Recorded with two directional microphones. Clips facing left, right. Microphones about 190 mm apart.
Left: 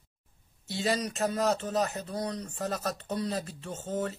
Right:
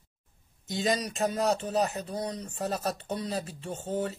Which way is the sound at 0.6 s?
15° right (ahead or behind).